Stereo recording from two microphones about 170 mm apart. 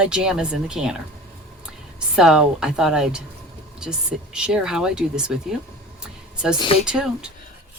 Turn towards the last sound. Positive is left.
turn(degrees=-5)  # may be behind; listen again after turning